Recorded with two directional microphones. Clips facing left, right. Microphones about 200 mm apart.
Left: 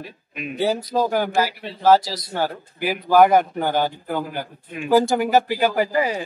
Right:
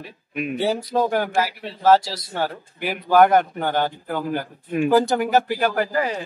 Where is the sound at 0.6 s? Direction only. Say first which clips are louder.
Left 1 dB; centre (ahead or behind).